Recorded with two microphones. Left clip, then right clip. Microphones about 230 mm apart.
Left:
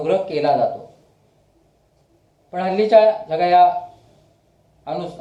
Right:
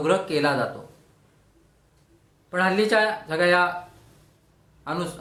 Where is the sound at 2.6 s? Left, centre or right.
Right.